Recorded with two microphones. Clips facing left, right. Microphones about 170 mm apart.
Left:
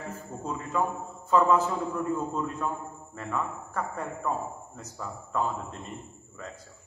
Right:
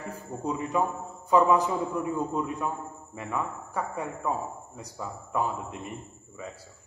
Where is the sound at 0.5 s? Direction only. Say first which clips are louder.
Right 2 dB; 15° right (ahead or behind).